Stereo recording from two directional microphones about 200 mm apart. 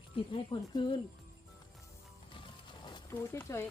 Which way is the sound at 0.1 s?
30° left (ahead or behind).